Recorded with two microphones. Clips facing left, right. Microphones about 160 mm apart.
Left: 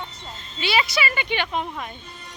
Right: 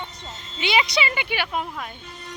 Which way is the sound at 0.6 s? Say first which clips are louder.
Right 1 dB; 20° right (ahead or behind).